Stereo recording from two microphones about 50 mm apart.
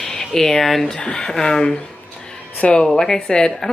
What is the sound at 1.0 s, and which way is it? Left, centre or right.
Speech, left.